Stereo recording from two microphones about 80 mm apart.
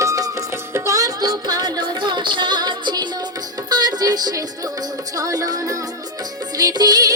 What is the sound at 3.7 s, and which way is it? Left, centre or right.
Music, right.